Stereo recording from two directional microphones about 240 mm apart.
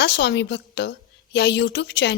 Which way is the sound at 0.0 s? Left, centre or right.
Left.